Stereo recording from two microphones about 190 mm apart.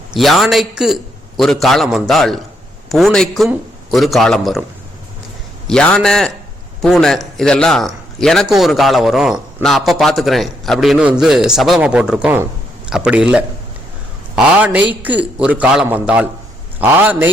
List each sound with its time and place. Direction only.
0.1 s a man's voice: centre (ahead or behind)
5.6 s a man's voice: 5° left (ahead or behind)